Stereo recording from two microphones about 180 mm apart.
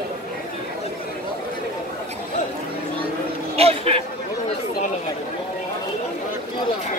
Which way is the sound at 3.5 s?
35° right (ahead or behind).